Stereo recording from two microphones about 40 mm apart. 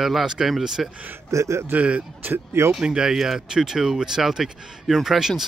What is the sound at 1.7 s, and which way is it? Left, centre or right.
Speech, right.